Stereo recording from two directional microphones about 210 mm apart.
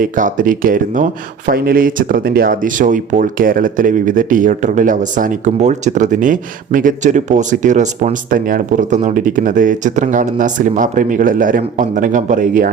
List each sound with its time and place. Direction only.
0.0 s speech: 40° right (ahead or behind)